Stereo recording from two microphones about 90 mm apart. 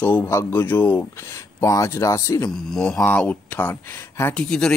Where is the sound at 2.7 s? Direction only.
5° left (ahead or behind).